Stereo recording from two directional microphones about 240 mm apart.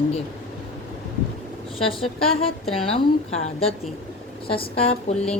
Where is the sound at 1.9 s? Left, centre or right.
Left.